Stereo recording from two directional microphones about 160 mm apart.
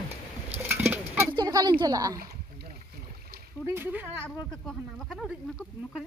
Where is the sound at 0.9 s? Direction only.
10° right (ahead or behind).